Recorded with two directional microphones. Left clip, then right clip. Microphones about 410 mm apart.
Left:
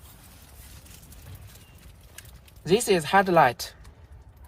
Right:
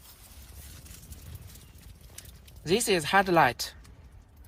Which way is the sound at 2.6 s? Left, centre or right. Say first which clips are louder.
Left 4 dB; centre.